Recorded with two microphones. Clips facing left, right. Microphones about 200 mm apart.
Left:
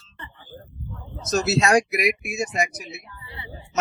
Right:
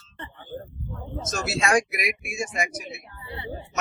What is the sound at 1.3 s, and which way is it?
Speech, 35° left (ahead or behind).